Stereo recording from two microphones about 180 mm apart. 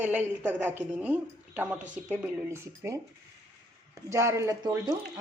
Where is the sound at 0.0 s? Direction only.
10° right (ahead or behind).